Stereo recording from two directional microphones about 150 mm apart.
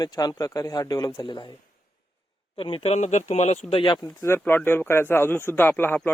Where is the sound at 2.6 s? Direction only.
35° left (ahead or behind).